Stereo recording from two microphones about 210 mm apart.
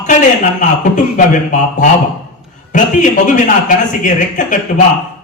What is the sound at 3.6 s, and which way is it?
A man's voice, 35° left (ahead or behind).